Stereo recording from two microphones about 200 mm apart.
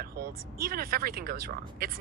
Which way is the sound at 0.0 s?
50° right (ahead or behind).